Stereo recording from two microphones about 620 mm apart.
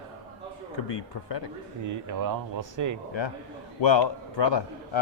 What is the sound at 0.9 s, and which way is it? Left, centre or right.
Speech, left.